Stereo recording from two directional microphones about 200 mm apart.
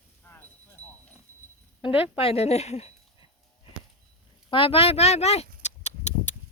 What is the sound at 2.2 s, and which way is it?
Speech, 30° left (ahead or behind).